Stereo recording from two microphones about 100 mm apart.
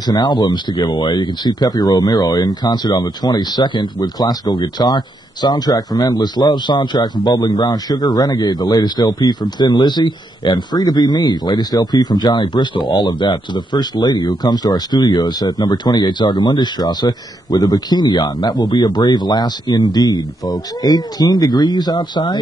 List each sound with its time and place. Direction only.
0.0 s a man's voice: 45° left (ahead or behind)